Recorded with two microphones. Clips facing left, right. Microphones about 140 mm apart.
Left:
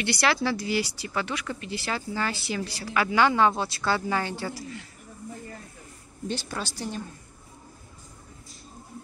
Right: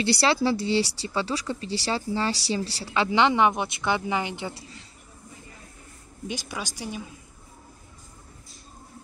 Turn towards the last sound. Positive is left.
turn(degrees=-10)  # may be behind; listen again after turning